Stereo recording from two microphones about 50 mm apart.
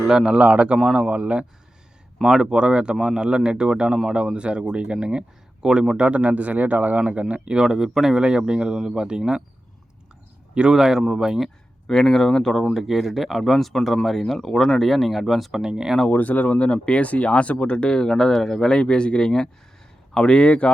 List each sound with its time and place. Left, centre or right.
0.0 s speech: centre
0.3 s speech: right
2.2 s speech: centre
6.0 s speech: right
10.5 s speech: centre
11.9 s speech: centre
12.7 s speech: centre
16.0 s speech: left
16.6 s speech: left